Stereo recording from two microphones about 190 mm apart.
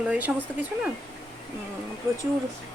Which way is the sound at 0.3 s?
5° right (ahead or behind).